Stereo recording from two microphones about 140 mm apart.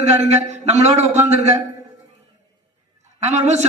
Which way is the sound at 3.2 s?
55° right (ahead or behind).